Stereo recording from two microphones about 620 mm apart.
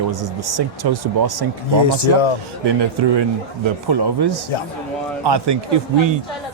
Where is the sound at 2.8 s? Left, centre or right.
Right.